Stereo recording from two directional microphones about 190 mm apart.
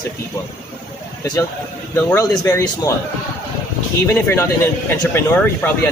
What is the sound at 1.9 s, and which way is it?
Speech, 15° left (ahead or behind).